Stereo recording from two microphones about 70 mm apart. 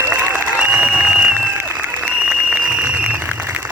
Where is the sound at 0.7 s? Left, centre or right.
Centre.